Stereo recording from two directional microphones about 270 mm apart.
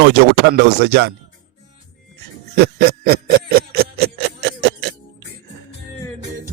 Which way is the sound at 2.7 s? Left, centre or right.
Right.